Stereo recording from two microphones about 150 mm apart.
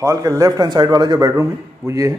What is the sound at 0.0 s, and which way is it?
A man's voice, 20° right (ahead or behind).